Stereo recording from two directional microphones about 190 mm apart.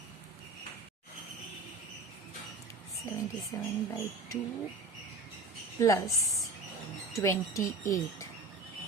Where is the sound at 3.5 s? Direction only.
15° left (ahead or behind).